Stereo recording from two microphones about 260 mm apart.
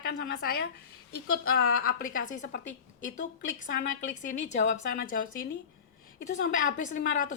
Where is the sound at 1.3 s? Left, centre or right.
Left.